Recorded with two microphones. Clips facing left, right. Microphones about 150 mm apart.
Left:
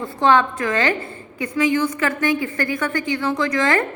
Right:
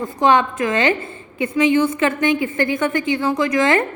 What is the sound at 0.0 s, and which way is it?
A woman's voice, 20° right (ahead or behind).